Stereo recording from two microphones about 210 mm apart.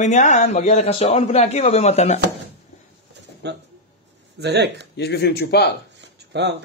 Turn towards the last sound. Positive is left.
turn(degrees=-55)  # may be behind; listen again after turning